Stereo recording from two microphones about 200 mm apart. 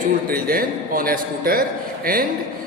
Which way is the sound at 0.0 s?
45° right (ahead or behind).